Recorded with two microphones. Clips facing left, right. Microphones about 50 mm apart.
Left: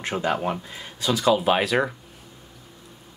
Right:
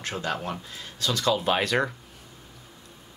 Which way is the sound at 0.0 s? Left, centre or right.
Left.